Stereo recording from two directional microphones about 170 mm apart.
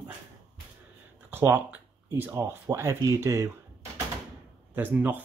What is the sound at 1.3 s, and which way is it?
Speech, 10° right (ahead or behind).